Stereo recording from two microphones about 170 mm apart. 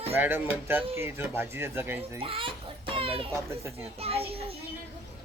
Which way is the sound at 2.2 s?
35° right (ahead or behind).